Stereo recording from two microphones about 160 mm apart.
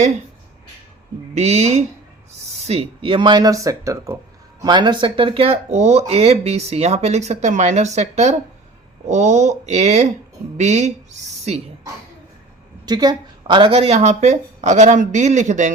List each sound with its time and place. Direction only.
1.4 s a woman's voice: 40° right (ahead or behind)
12.8 s a woman's voice: 25° right (ahead or behind); by 15.7 s 50° right (ahead or behind)